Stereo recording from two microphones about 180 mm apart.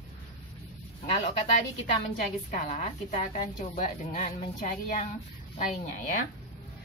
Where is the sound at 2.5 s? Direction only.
40° left (ahead or behind).